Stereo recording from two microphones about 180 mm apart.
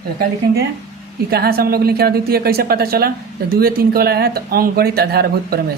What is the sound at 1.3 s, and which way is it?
A woman's voice, 60° right (ahead or behind).